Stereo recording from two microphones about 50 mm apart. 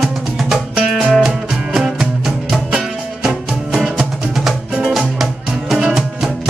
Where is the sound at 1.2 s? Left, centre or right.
Centre.